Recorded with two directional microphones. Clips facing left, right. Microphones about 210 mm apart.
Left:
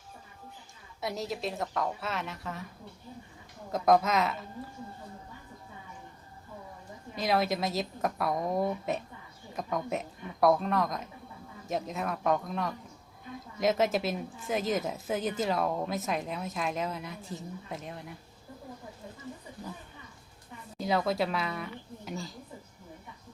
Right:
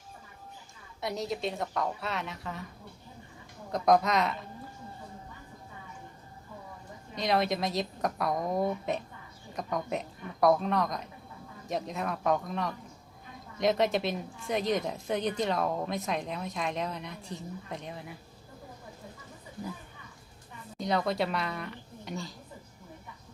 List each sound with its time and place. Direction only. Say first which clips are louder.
1.0 s a woman's voice: right 1 dB; centre (ahead or behind)
3.7 s a woman's voice: even; centre (ahead or behind)
7.2 s a woman's voice: even; centre (ahead or behind)
20.7 s a woman's voice: left 1 dB; 5° left (ahead or behind)